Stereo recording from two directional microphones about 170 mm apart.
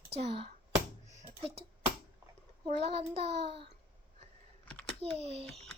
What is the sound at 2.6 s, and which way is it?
Child singing, 35° right (ahead or behind).